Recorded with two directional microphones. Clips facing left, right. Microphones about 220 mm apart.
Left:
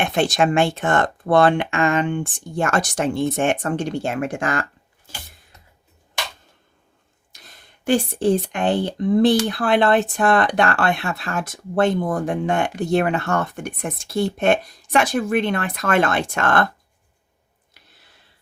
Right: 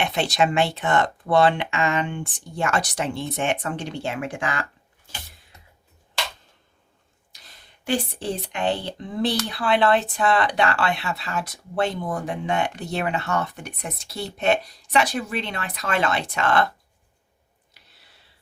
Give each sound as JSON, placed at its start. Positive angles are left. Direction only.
{"t": 0.0, "sound": "speech", "side_deg": 50}
{"t": 7.9, "sound": "speech", "side_deg": 50}